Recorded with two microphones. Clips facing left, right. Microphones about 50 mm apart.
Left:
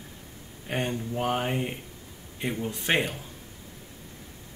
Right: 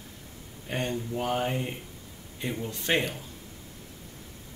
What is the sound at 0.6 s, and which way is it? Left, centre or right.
Speech, centre.